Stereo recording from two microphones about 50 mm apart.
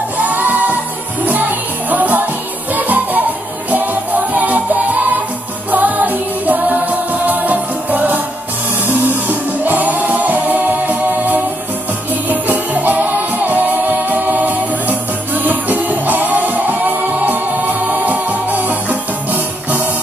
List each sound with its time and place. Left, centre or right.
0.2 s music: right
1.9 s music: right
5.7 s music: right